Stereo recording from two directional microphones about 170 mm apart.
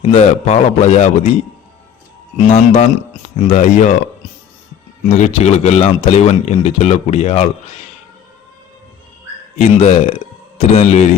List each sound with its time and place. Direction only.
0.0 s speech: 40° left (ahead or behind)
2.5 s speech: 40° left (ahead or behind)
5.2 s speech: 40° left (ahead or behind)
9.6 s speech: 35° left (ahead or behind)